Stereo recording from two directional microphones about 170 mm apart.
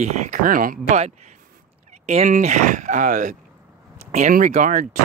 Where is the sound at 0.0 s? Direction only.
50° right (ahead or behind).